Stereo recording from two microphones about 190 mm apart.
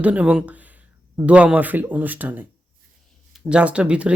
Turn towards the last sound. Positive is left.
turn(degrees=-5)  # may be behind; listen again after turning